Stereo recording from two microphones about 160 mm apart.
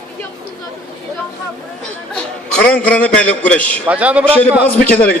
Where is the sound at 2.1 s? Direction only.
5° left (ahead or behind).